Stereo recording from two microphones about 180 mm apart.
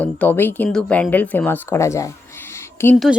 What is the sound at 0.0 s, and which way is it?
Speech, 10° left (ahead or behind).